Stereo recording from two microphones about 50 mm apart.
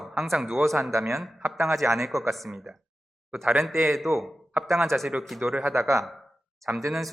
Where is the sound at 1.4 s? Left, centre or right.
Right.